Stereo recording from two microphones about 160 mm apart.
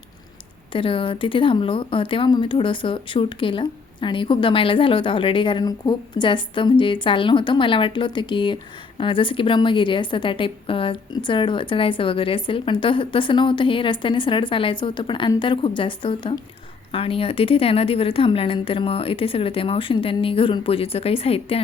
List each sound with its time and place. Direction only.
0.7 s speech: 35° left (ahead or behind)